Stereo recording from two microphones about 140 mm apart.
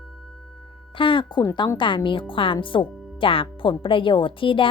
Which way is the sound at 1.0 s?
35° left (ahead or behind).